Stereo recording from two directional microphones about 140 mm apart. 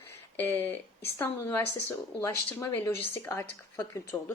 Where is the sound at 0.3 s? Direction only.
15° left (ahead or behind).